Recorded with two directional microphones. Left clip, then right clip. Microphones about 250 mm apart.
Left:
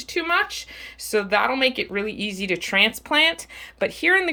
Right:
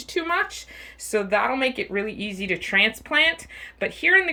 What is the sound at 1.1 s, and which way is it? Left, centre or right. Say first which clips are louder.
Speech: left 1 dB; centre.